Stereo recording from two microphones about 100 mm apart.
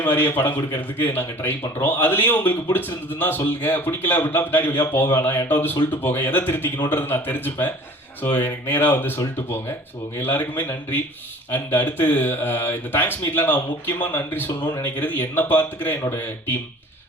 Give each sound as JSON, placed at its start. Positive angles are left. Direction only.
{"t": 0.0, "sound": "speech", "side_deg": 20}